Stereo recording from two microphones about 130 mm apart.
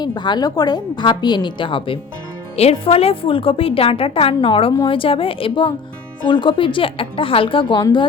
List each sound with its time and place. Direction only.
0.0 s a woman's voice: 35° left (ahead or behind)